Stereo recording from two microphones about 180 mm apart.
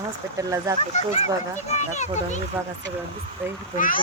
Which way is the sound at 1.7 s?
40° left (ahead or behind).